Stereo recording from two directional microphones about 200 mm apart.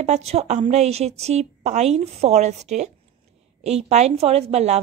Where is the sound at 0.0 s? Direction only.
30° right (ahead or behind).